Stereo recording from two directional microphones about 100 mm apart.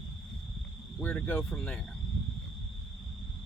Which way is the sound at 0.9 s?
15° left (ahead or behind).